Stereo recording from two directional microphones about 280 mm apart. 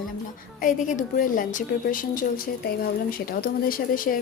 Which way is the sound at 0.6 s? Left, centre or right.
Left.